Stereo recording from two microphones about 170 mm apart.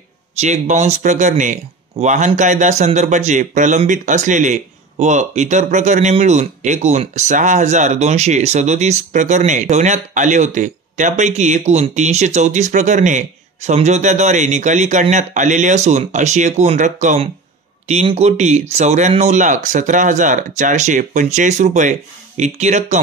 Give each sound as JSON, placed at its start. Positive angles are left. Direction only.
{"t": 0.4, "sound": "speech", "side_deg": -45}